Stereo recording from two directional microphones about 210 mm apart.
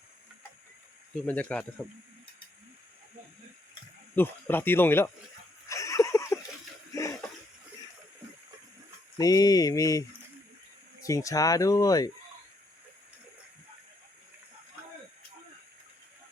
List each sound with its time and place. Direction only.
1.2 s speech: 5° left (ahead or behind)
4.1 s speech: 10° left (ahead or behind)
5.6 s a sound: 15° left (ahead or behind)
9.1 s speech: 15° left (ahead or behind)